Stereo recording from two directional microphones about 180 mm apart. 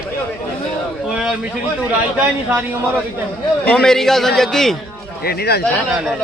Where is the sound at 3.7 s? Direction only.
5° left (ahead or behind).